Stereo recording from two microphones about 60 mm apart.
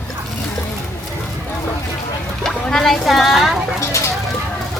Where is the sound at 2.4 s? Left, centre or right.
Centre.